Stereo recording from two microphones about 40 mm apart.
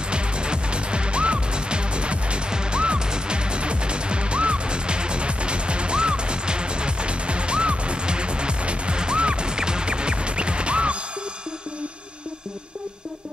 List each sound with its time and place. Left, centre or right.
0.1 s music: right